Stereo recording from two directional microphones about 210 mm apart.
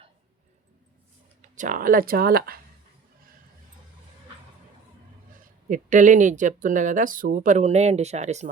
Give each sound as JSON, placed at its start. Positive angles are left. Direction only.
{"t": 1.4, "sound": "speech", "side_deg": -40}
{"t": 5.3, "sound": "speech", "side_deg": -40}